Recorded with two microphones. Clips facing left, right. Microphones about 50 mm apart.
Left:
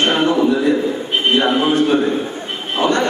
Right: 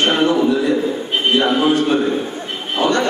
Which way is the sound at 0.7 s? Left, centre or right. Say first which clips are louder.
Left 1 dB; centre.